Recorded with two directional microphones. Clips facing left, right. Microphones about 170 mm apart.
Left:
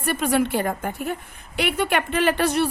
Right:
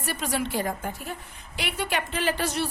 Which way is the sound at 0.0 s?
55° left (ahead or behind).